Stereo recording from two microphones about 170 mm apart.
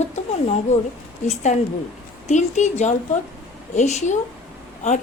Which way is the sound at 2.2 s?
45° left (ahead or behind).